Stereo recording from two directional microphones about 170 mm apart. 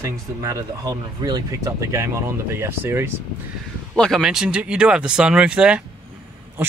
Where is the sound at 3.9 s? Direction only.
5° left (ahead or behind).